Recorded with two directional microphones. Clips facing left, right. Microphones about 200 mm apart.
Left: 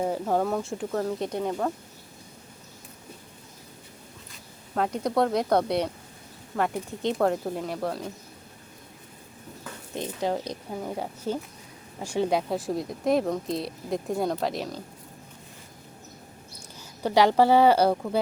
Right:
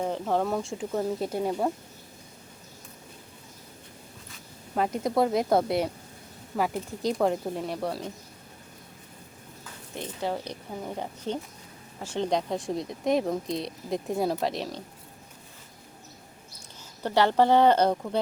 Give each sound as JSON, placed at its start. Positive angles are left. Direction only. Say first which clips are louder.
{"t": 0.0, "sound": "speech", "louder": "left 2 dB", "side_deg": 5}
{"t": 4.7, "sound": "speech", "louder": "even", "side_deg": 0}
{"t": 7.0, "sound": "speech", "louder": "left 1 dB", "side_deg": 0}
{"t": 9.9, "sound": "speech", "louder": "left 3 dB", "side_deg": 15}
{"t": 17.0, "sound": "speech", "louder": "left 2 dB", "side_deg": 10}